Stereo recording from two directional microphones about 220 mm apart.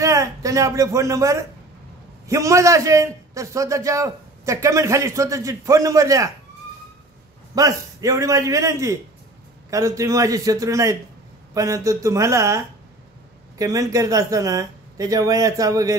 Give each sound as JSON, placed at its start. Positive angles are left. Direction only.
{"t": 0.0, "sound": "a man's voice", "side_deg": -15}
{"t": 7.5, "sound": "a man's voice", "side_deg": -15}